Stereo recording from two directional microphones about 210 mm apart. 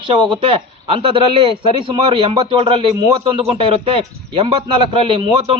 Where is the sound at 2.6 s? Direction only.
25° right (ahead or behind).